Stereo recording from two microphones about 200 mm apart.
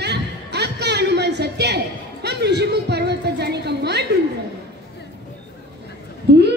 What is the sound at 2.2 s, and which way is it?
Music, 55° right (ahead or behind).